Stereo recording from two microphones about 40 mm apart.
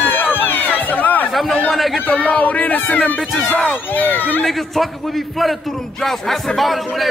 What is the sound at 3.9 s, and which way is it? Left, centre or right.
Speech, left.